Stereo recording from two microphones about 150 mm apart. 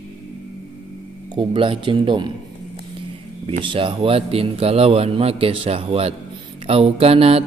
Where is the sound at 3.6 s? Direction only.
35° right (ahead or behind).